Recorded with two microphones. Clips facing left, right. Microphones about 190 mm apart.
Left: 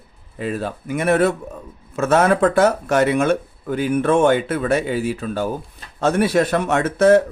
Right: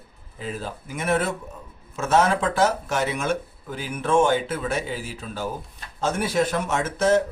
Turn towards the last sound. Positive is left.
turn(degrees=60)  # may be behind; listen again after turning